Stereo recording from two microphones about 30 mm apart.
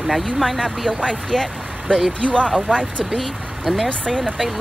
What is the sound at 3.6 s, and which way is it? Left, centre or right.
Speech, centre.